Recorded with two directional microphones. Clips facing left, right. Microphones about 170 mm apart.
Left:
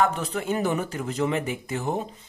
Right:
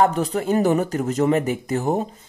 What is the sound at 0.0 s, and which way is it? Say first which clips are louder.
Speech: right 5 dB; 40° right (ahead or behind).